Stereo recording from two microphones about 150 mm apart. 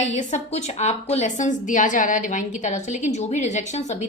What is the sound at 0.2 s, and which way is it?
A woman's voice, 55° left (ahead or behind).